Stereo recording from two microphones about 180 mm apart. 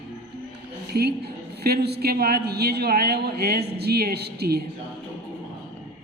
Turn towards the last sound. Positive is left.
turn(degrees=-65)  # may be behind; listen again after turning